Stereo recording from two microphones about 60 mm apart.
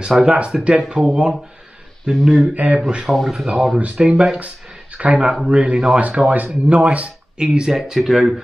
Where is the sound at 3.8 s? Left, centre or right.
Centre.